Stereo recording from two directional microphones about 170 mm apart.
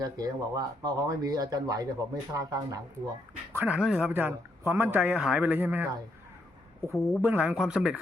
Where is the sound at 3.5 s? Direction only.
10° right (ahead or behind).